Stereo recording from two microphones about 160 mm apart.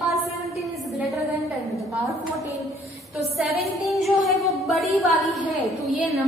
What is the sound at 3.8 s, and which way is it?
A woman's voice, centre (ahead or behind).